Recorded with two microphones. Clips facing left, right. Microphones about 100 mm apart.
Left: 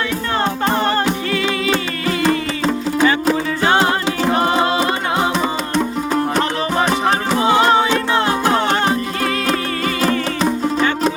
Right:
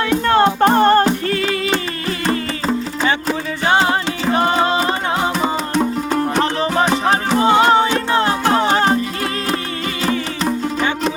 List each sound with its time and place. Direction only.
0.1 s music: 55° right (ahead or behind); by 1.5 s 40° right (ahead or behind)
4.4 s music: centre (ahead or behind)
5.4 s music: 15° right (ahead or behind)